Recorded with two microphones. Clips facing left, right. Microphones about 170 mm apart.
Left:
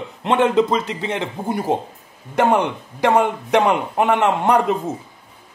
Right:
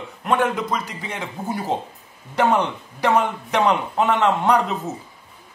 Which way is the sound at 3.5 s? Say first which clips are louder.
Left 3 dB; 15° left (ahead or behind).